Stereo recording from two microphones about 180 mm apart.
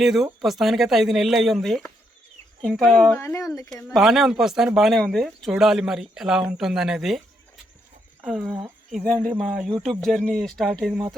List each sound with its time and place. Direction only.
0.0 s speech: centre (ahead or behind)
3.2 s speech: 15° left (ahead or behind)
3.8 s speech: centre (ahead or behind)
8.2 s speech: centre (ahead or behind)
9.6 s speech: centre (ahead or behind)